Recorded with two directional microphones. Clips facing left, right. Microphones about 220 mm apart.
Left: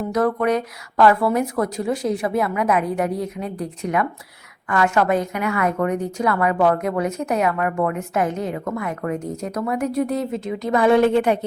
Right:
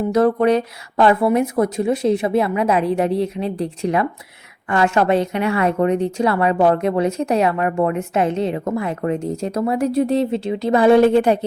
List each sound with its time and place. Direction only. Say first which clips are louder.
0.1 s a woman's voice: right 4 dB; 30° right (ahead or behind)